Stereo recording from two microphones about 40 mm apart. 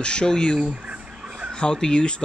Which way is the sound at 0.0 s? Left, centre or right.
Left.